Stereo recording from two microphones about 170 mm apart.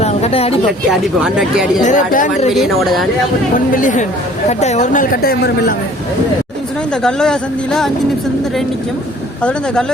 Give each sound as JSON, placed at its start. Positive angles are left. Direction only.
{"t": 0.0, "sound": "a sound", "side_deg": 35}
{"t": 0.9, "sound": "speech", "side_deg": -5}
{"t": 1.8, "sound": "speech", "side_deg": 45}
{"t": 2.5, "sound": "speech", "side_deg": 0}
{"t": 3.5, "sound": "a woman's voice", "side_deg": 50}
{"t": 7.0, "sound": "speech", "side_deg": 5}
{"t": 9.4, "sound": "speech", "side_deg": 5}